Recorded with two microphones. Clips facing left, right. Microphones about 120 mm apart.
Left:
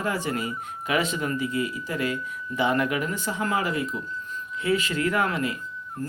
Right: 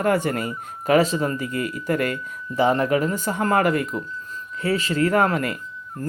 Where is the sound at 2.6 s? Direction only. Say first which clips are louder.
Right 5 dB; 40° right (ahead or behind); by 3.9 s 55° right (ahead or behind).